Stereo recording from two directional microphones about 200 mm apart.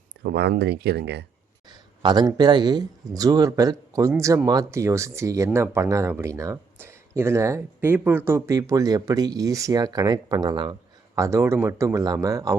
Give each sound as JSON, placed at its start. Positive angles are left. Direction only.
{"t": 0.2, "sound": "speech", "side_deg": -55}
{"t": 1.7, "sound": "speech", "side_deg": -20}